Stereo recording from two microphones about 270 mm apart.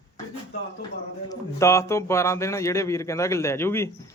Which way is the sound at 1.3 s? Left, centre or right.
Centre.